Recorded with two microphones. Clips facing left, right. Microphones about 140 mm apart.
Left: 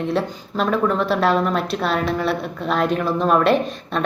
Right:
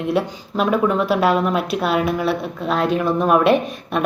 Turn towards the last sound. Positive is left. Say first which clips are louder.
# right 1 dB
turn(degrees=-5)  # may be behind; listen again after turning